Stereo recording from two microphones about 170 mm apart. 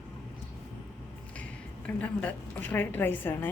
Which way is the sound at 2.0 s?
10° left (ahead or behind).